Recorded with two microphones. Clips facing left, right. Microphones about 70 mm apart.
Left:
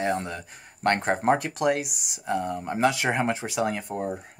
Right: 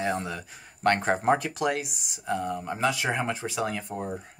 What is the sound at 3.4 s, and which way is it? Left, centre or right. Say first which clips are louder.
Speech: left 3 dB; centre.